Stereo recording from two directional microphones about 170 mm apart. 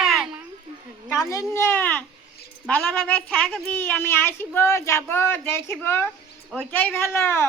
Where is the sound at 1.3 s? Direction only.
20° left (ahead or behind).